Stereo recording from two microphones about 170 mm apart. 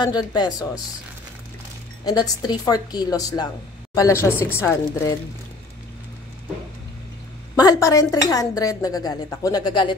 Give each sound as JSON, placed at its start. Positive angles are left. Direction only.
{"t": 0.0, "sound": "a woman's voice", "side_deg": 25}
{"t": 2.0, "sound": "a woman's voice", "side_deg": 25}
{"t": 7.5, "sound": "a woman's voice", "side_deg": 20}